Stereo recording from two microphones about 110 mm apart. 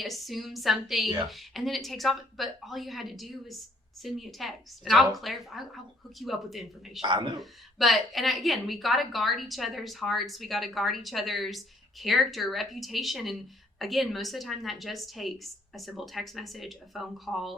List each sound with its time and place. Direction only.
0.0 s a woman's voice: centre (ahead or behind)
7.0 s speech: 45° right (ahead or behind)
7.3 s a woman's voice: centre (ahead or behind)